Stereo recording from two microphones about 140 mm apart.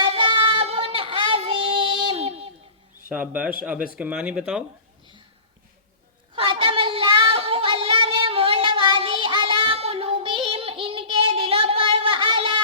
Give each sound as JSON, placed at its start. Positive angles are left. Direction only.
{"t": 0.0, "sound": "child singing", "side_deg": -40}
{"t": 3.1, "sound": "speech", "side_deg": -10}
{"t": 6.3, "sound": "child singing", "side_deg": -40}